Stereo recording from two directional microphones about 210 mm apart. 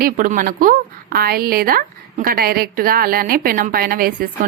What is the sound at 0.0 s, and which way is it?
A woman's voice, 40° right (ahead or behind).